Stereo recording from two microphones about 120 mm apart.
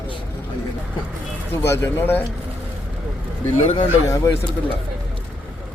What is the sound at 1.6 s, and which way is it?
Speech, 20° left (ahead or behind).